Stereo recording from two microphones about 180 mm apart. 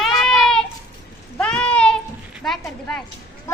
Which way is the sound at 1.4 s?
5° left (ahead or behind).